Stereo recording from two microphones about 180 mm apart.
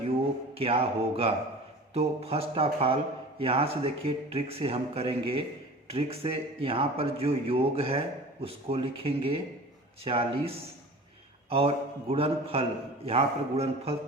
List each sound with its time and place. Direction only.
0.5 s speech: 30° right (ahead or behind)